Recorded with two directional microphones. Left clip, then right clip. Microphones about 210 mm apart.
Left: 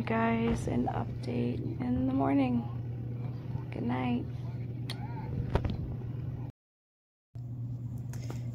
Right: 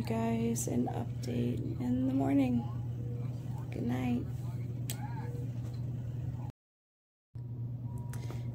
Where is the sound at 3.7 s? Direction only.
10° right (ahead or behind).